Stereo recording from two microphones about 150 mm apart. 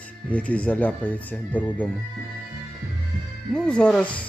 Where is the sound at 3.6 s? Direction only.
5° left (ahead or behind).